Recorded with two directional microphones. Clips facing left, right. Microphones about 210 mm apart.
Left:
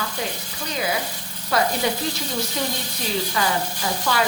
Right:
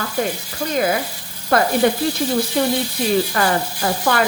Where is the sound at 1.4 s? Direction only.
55° right (ahead or behind).